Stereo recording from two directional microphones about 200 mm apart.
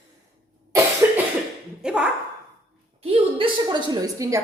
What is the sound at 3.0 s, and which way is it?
A woman's voice, 30° right (ahead or behind).